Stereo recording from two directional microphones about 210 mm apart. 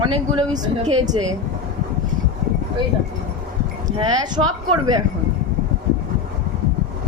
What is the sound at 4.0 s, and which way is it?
Speech, 20° right (ahead or behind).